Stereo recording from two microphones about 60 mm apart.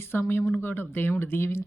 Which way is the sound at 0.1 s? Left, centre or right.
Left.